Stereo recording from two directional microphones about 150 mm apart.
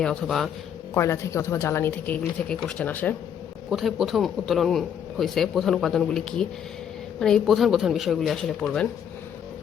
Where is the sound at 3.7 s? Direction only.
Centre (ahead or behind).